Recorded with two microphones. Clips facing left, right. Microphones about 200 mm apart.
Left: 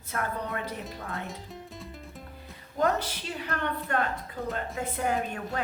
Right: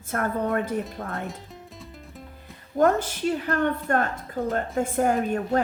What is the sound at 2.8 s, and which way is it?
A woman's voice, 50° right (ahead or behind).